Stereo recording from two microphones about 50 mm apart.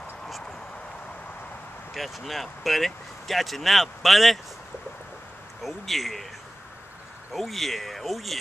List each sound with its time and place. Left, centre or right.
2.0 s speech: centre
5.6 s speech: centre
7.3 s speech: centre